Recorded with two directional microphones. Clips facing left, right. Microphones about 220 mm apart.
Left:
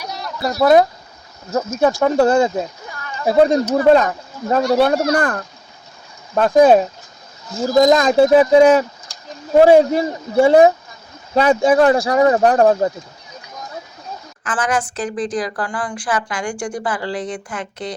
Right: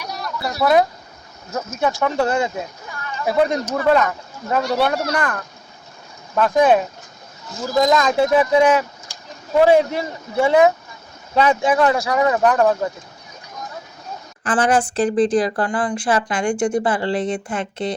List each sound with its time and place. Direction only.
0.6 s speech: 45° left (ahead or behind)
1.5 s speech: 35° left (ahead or behind)
9.6 s speech: 45° left (ahead or behind)
14.4 s speech: 30° right (ahead or behind)